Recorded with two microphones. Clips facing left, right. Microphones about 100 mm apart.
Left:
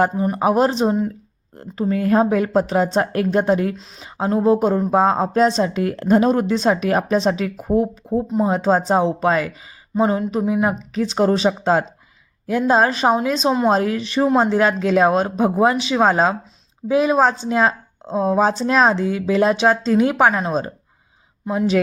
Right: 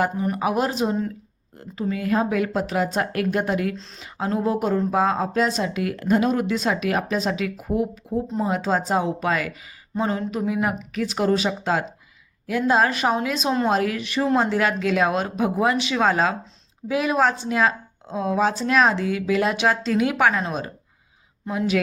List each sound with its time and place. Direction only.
0.0 s speech: 30° left (ahead or behind)
3.8 s speech: 5° left (ahead or behind)
4.0 s speech: 25° left (ahead or behind)